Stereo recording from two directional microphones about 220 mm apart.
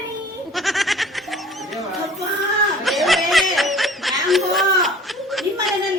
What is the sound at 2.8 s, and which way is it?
Snicker, centre (ahead or behind).